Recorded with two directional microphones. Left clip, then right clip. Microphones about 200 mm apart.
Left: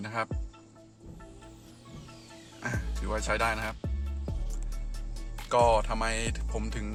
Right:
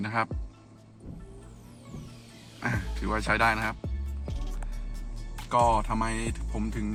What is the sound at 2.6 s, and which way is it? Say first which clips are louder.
Speech: right 4 dB; 5° left (ahead or behind).